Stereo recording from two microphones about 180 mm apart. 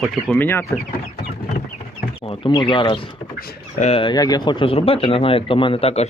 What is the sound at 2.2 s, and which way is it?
Speech, 25° left (ahead or behind).